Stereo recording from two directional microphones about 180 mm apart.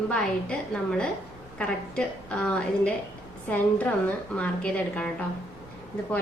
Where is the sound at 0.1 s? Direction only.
5° left (ahead or behind).